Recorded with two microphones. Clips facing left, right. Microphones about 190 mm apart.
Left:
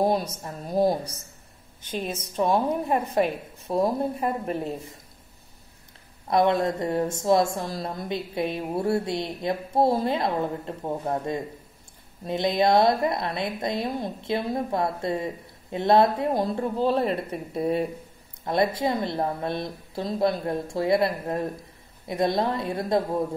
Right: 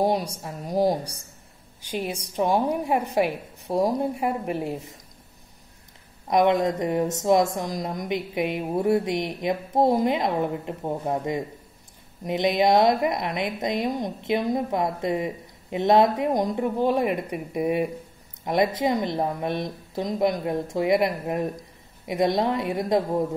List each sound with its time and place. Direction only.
0.0 s a woman's voice: 15° right (ahead or behind)
6.2 s a woman's voice: 15° right (ahead or behind)